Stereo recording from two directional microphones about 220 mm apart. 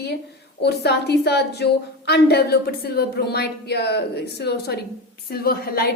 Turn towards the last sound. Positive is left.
turn(degrees=45)  # may be behind; listen again after turning